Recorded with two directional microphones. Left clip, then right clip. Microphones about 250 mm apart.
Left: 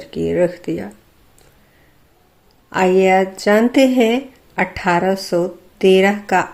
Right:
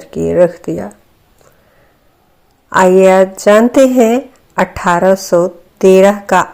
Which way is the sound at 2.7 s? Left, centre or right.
Centre.